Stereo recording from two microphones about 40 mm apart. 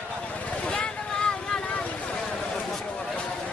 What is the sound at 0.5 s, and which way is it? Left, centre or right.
Vehicle, left.